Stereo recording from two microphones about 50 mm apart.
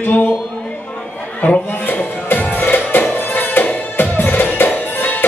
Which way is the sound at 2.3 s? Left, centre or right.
Left.